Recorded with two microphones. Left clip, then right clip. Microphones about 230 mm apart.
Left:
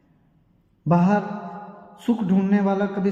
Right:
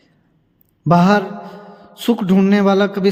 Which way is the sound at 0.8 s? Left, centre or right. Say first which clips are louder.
Right 8 dB; right.